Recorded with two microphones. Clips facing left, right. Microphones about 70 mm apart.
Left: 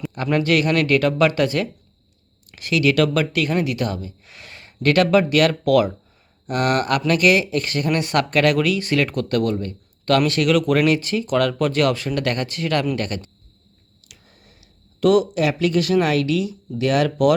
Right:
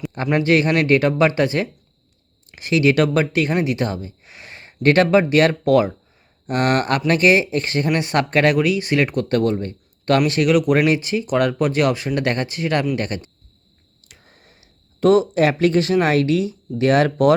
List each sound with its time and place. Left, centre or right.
0.3 s speech: right
14.1 s a sound: right
15.0 s speech: right